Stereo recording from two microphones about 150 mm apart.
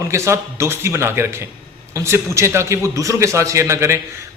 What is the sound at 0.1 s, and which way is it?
A man's voice, 20° right (ahead or behind).